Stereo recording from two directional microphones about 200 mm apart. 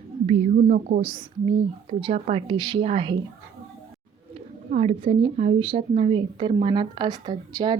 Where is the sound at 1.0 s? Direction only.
25° right (ahead or behind).